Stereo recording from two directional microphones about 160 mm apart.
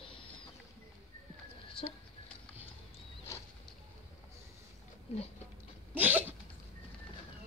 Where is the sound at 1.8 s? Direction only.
35° left (ahead or behind).